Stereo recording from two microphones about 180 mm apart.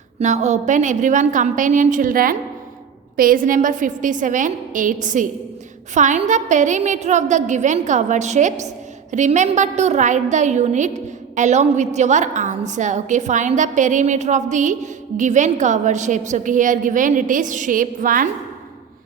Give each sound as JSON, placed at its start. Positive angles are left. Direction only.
{"t": 0.2, "sound": "a woman's voice", "side_deg": -40}